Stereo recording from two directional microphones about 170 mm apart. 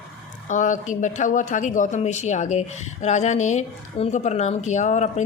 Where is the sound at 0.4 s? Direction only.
45° left (ahead or behind).